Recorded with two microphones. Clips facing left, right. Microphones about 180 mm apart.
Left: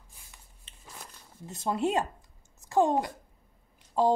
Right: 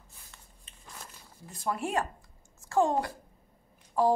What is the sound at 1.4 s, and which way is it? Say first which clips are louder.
A child's voice: left 4 dB; 25° left (ahead or behind).